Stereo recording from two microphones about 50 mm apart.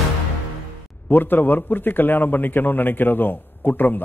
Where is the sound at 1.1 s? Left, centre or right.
Left.